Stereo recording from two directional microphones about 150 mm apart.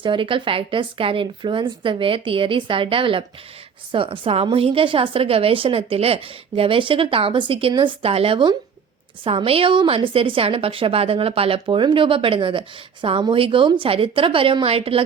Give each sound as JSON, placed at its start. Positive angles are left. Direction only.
{"t": 0.0, "sound": "a woman's voice", "side_deg": -35}